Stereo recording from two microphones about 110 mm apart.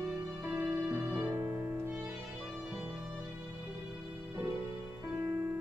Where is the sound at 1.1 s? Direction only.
35° right (ahead or behind).